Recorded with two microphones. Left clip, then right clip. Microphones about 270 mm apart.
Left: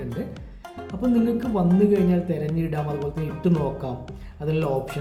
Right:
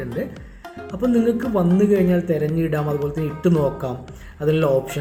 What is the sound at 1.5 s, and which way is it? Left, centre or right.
A man's voice, centre.